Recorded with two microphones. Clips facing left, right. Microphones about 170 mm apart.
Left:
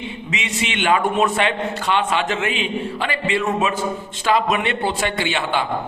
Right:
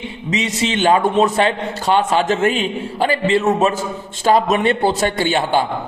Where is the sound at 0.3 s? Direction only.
35° right (ahead or behind).